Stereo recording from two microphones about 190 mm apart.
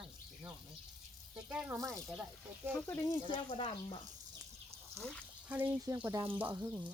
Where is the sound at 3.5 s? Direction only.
25° left (ahead or behind).